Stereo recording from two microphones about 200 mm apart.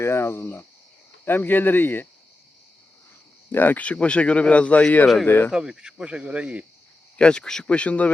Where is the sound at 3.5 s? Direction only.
10° left (ahead or behind).